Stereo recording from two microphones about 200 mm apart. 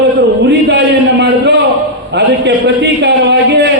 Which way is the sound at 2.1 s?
55° right (ahead or behind).